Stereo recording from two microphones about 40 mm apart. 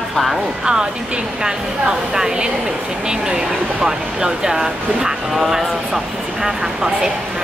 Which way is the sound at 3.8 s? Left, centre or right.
Centre.